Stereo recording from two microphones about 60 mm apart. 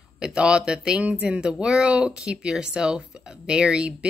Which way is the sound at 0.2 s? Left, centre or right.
Centre.